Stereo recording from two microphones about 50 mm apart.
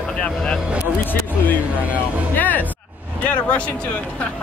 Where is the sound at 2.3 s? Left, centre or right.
Left.